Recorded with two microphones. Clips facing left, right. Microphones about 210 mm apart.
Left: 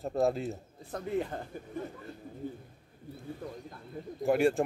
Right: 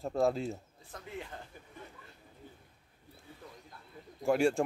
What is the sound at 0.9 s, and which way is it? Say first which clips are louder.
A man's voice: left 11 dB; 40° left (ahead or behind).